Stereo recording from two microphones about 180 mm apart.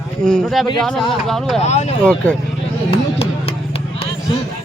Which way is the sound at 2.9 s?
35° left (ahead or behind).